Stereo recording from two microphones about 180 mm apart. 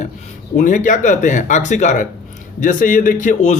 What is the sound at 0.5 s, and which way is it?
A man's voice, 45° left (ahead or behind).